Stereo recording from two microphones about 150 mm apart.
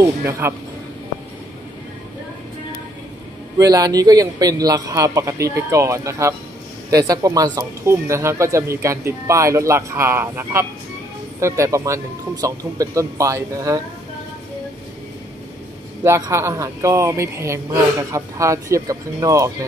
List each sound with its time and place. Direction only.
0.0 s speech: 15° right (ahead or behind)
3.5 s speech: 25° right (ahead or behind)
16.0 s speech: 20° right (ahead or behind)